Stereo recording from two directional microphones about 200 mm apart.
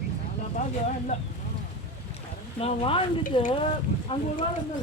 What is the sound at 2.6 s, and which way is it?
Speech, 30° left (ahead or behind).